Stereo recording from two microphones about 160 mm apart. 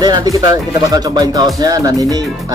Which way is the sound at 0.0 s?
25° right (ahead or behind).